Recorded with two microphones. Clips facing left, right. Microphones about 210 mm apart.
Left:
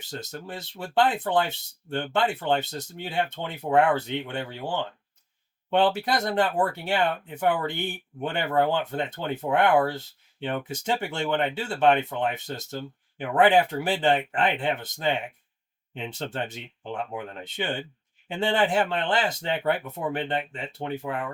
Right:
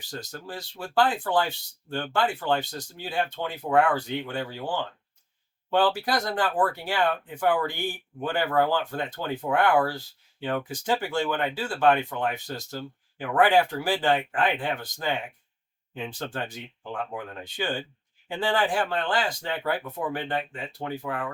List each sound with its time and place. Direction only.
0.0 s speech: 20° left (ahead or behind)